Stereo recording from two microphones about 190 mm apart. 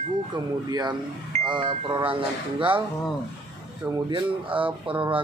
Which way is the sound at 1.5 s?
25° right (ahead or behind).